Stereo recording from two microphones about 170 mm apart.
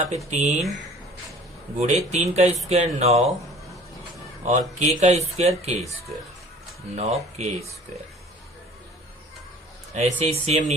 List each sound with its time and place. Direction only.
0.3 s speech: 45° right (ahead or behind)
1.8 s speech: 40° right (ahead or behind)
4.4 s speech: 40° right (ahead or behind)
6.9 s speech: 40° right (ahead or behind)
9.9 s speech: 40° right (ahead or behind)